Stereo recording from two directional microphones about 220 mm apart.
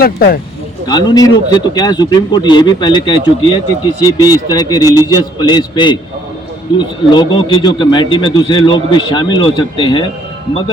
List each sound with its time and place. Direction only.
0.0 s speech: 45° left (ahead or behind)
0.9 s a man's voice: 20° left (ahead or behind)